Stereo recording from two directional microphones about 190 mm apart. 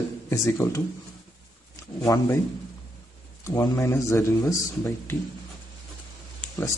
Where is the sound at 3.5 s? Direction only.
15° left (ahead or behind).